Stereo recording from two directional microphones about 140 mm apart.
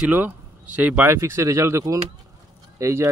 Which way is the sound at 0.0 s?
10° right (ahead or behind).